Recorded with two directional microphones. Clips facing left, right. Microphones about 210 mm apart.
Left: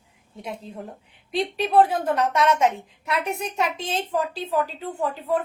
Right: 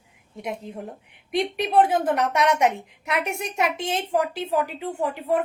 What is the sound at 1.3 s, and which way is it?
A woman's voice, 15° right (ahead or behind).